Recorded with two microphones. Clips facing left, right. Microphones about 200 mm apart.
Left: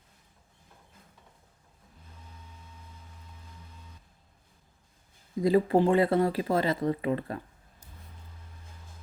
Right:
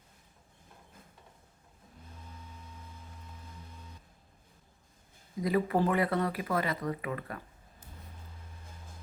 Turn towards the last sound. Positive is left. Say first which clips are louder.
# left 6 dB
turn(degrees=30)  # may be behind; listen again after turning